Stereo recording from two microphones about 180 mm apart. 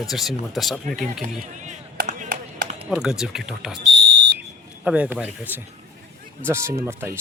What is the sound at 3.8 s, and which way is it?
Smoke detector, 70° right (ahead or behind).